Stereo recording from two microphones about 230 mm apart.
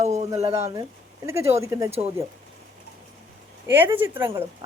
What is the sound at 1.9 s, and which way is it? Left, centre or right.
Speech, right.